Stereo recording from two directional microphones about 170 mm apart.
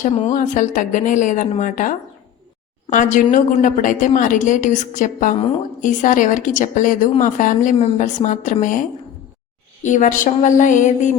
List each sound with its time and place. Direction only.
0.2 s a woman's voice: 45° left (ahead or behind)